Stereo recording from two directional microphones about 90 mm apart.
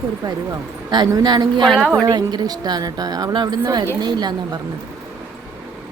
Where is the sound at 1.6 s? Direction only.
5° left (ahead or behind).